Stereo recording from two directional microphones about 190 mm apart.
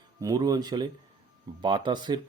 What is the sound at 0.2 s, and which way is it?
Speech, 20° right (ahead or behind).